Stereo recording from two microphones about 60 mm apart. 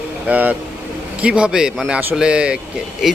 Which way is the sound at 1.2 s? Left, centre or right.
Centre.